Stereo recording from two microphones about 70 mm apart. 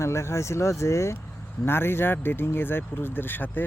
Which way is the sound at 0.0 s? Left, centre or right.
Left.